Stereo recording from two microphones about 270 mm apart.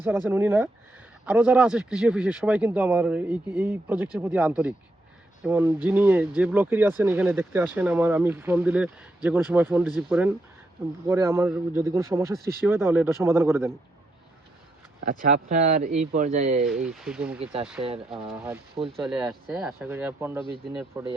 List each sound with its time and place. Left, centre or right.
0.3 s speech: centre
15.1 s speech: right
16.6 s speech: centre
17.4 s speech: centre